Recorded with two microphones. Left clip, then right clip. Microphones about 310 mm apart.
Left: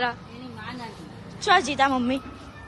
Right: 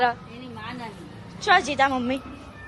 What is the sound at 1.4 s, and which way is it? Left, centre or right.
Speech, centre.